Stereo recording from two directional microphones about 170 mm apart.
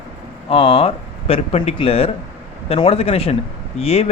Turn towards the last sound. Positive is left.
turn(degrees=35)  # may be behind; listen again after turning